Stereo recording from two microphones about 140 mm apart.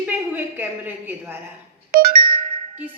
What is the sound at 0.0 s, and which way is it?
A woman's voice, 15° right (ahead or behind).